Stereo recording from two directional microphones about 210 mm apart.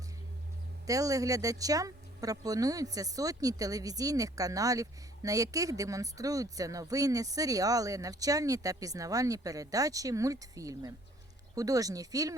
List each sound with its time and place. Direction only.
0.9 s speech: 15° right (ahead or behind)